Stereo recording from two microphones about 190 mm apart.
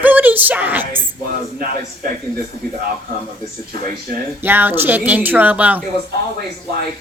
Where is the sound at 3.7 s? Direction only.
50° right (ahead or behind).